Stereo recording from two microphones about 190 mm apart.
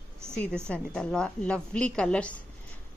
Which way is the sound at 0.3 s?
5° left (ahead or behind).